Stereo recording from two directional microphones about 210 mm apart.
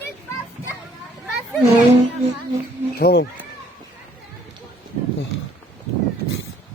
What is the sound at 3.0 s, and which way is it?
Speech, 50° left (ahead or behind).